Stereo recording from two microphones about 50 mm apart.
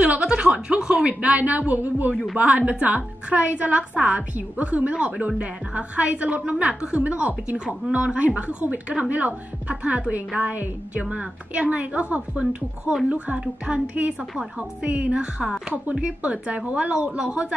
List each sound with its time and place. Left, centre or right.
0.0 s chuckle: centre
1.0 s a woman's voice: right